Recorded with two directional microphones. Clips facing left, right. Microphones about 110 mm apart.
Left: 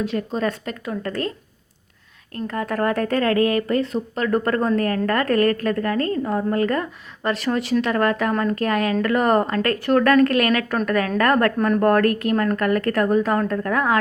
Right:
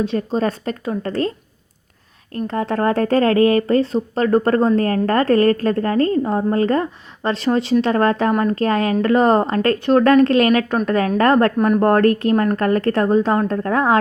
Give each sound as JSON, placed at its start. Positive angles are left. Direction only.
{"t": 0.0, "sound": "speech", "side_deg": -30}
{"t": 2.5, "sound": "speech", "side_deg": -30}
{"t": 11.5, "sound": "speech", "side_deg": -10}
{"t": 11.8, "sound": "speech", "side_deg": -30}